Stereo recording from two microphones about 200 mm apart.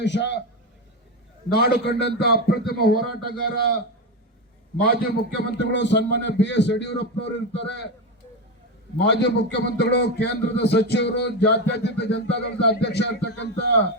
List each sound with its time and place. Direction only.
0.0 s a man's voice: 60° left (ahead or behind)
1.5 s a man's voice: 50° left (ahead or behind)
5.5 s a man's voice: 60° left (ahead or behind)
9.0 s a man's voice: 60° left (ahead or behind)